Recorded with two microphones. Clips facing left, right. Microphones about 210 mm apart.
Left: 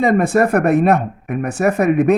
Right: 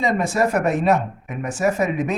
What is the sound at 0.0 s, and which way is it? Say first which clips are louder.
Speech: left 6 dB; 55° left (ahead or behind).